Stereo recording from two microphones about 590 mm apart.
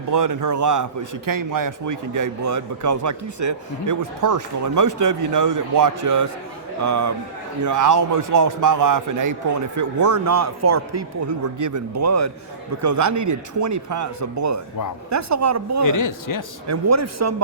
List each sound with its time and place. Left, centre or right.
0.1 s a man's voice: right
15.8 s a man's voice: left
16.6 s a man's voice: right